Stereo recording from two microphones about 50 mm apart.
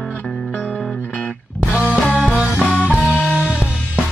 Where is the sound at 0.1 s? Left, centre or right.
Centre.